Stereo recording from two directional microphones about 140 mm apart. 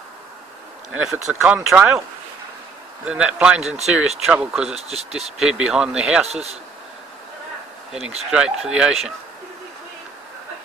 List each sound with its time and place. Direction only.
0.9 s speech: 5° right (ahead or behind)
1.8 s a man's voice: 15° right (ahead or behind)
3.1 s a man's voice: 10° right (ahead or behind)
4.7 s speech: 50° right (ahead or behind)
5.4 s speech: 5° right (ahead or behind)
6.2 s speech: 50° right (ahead or behind)
8.3 s speech: 5° right (ahead or behind)